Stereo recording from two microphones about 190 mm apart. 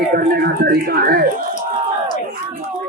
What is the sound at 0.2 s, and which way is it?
Speech, 60° right (ahead or behind).